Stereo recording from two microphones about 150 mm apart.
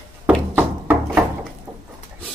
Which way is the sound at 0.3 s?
10° right (ahead or behind).